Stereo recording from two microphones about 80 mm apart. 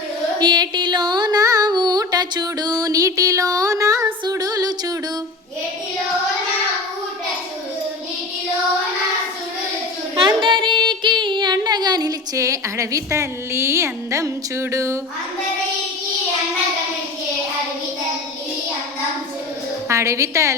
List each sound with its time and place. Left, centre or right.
0.3 s music: right
10.2 s a sound: right
19.9 s a woman's voice: right